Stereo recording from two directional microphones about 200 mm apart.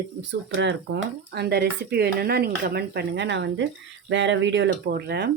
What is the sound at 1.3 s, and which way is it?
Speech, 50° right (ahead or behind).